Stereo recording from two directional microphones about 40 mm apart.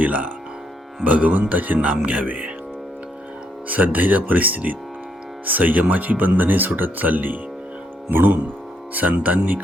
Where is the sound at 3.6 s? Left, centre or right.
Right.